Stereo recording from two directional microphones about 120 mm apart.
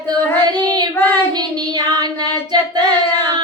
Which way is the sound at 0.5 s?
35° right (ahead or behind).